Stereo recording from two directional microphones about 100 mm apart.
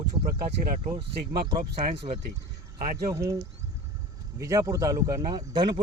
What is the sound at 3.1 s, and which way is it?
Speech, 35° right (ahead or behind).